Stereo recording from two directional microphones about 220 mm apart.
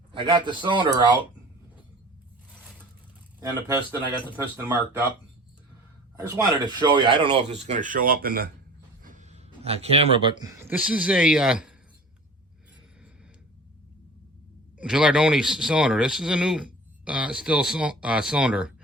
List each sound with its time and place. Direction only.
0.1 s speech: 20° right (ahead or behind)
4.5 s speech: 10° right (ahead or behind)
6.1 s speech: 15° right (ahead or behind); by 8.4 s 40° right (ahead or behind)
9.0 s a sound: 35° right (ahead or behind)
9.6 s speech: 25° right (ahead or behind); by 11.7 s 5° right (ahead or behind)
14.8 s speech: 5° right (ahead or behind)